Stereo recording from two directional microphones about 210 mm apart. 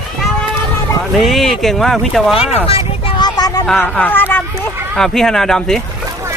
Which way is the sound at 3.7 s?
10° left (ahead or behind).